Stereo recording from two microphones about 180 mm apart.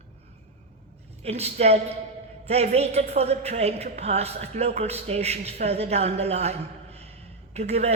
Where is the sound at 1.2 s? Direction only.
35° right (ahead or behind).